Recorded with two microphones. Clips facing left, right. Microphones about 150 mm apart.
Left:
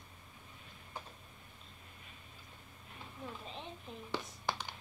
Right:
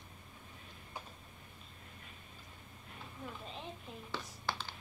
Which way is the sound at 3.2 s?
Centre (ahead or behind).